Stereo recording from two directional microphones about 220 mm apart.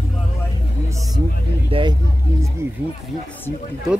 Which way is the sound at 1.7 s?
25° right (ahead or behind).